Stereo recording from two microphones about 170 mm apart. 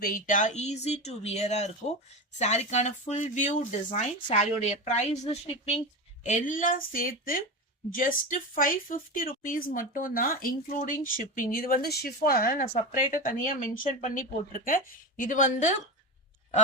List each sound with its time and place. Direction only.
0.0 s speech: 55° left (ahead or behind); by 5.8 s 35° left (ahead or behind)
6.2 s speech: 45° left (ahead or behind)